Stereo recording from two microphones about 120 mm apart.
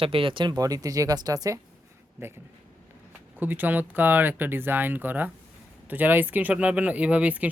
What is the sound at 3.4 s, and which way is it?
Speech, 15° right (ahead or behind).